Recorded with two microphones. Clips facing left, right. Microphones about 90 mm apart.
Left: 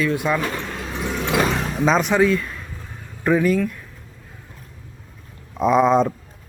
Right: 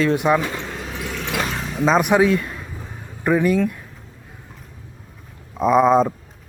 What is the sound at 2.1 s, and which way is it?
Speech, 15° right (ahead or behind).